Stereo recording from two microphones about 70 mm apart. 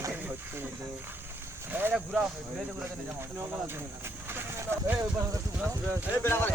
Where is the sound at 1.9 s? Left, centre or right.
Centre.